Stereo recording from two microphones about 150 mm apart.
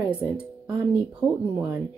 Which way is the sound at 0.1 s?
5° right (ahead or behind).